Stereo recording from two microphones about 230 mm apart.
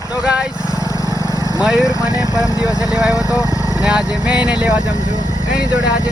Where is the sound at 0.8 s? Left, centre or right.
Centre.